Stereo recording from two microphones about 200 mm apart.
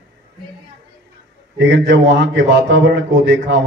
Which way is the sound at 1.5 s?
60° right (ahead or behind).